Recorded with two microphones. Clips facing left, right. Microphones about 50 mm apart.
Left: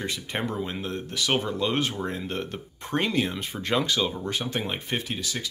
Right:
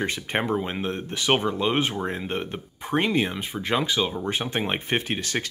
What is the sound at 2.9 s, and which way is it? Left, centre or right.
Speech, centre.